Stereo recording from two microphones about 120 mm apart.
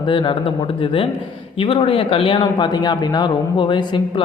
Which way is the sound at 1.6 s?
45° left (ahead or behind).